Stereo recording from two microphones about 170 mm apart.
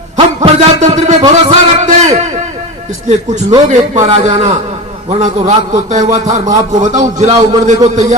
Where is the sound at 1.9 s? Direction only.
45° right (ahead or behind).